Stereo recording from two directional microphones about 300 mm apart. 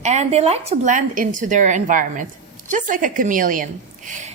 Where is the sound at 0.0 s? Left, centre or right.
Right.